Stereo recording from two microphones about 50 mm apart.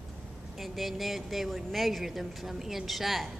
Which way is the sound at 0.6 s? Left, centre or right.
Centre.